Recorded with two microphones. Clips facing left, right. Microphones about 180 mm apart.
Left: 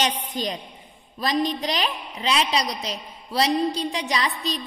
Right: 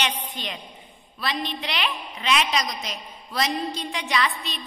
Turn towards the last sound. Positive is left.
turn(degrees=35)  # may be behind; listen again after turning